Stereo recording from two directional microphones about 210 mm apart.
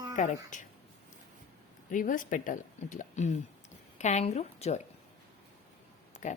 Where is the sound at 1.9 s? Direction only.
40° left (ahead or behind).